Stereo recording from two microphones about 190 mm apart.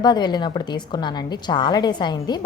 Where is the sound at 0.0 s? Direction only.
20° left (ahead or behind).